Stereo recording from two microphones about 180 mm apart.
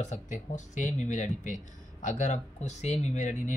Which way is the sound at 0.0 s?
40° left (ahead or behind).